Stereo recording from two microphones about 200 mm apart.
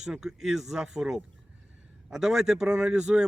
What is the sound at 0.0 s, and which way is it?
Speech, 5° right (ahead or behind).